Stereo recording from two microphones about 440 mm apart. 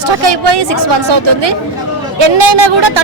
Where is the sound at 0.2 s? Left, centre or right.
Right.